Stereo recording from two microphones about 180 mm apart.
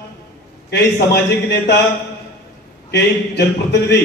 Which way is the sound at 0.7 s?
65° left (ahead or behind).